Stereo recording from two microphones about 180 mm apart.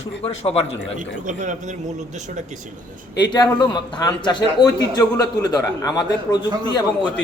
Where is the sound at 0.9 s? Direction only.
45° right (ahead or behind).